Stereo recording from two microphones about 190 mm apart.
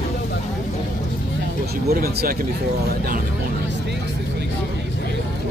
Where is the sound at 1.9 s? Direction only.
50° right (ahead or behind).